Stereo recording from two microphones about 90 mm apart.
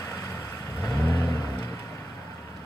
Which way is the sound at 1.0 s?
20° left (ahead or behind).